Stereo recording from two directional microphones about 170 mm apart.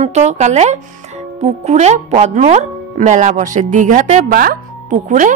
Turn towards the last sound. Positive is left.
turn(degrees=-50)  # may be behind; listen again after turning